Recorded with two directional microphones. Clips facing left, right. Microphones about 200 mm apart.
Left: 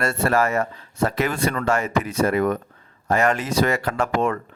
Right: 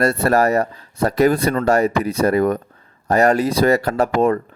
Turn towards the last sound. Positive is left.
turn(degrees=-35)  # may be behind; listen again after turning